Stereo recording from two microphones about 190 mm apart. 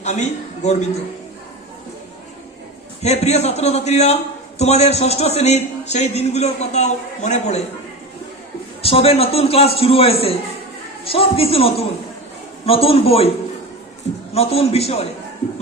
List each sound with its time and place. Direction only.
0.0 s a man's voice: 40° left (ahead or behind)
3.0 s a man's voice: 35° left (ahead or behind)
8.8 s a man's voice: 30° left (ahead or behind)
14.3 s a man's voice: 30° left (ahead or behind)